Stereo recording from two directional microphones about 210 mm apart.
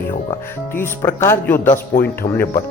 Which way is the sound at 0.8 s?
10° left (ahead or behind).